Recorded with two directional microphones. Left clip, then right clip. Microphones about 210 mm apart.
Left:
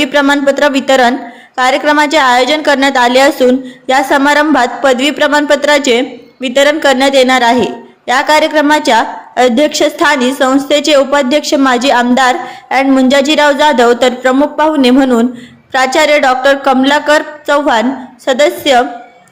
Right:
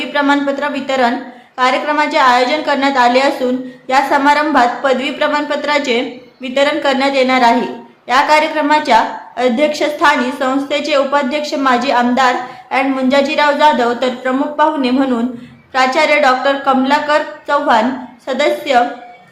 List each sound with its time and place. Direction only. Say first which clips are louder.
0.0 s a woman's voice: left 5 dB; 40° left (ahead or behind)